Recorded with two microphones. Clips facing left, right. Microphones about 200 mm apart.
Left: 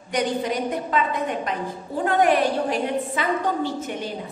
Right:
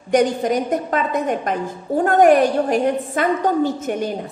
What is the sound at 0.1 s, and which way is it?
A woman's voice, 45° right (ahead or behind).